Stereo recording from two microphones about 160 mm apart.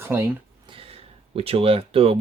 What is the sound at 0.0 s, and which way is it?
Speech, 15° right (ahead or behind).